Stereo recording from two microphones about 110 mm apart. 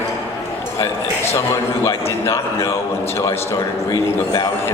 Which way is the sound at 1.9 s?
25° left (ahead or behind).